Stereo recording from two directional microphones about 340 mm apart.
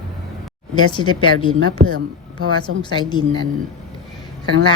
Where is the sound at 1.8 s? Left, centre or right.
Right.